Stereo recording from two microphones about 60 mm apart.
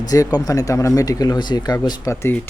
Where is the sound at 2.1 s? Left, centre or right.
Left.